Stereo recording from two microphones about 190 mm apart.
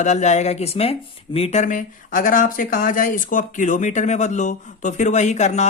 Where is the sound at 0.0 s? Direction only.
40° left (ahead or behind).